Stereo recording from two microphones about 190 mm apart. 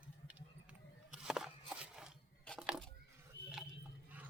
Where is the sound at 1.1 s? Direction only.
5° right (ahead or behind).